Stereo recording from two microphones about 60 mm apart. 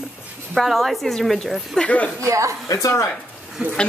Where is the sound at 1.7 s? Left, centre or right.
Centre.